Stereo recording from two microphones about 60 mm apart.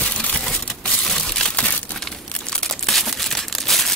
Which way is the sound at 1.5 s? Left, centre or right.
Centre.